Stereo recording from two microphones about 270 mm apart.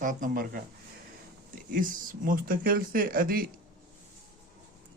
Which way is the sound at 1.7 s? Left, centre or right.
Right.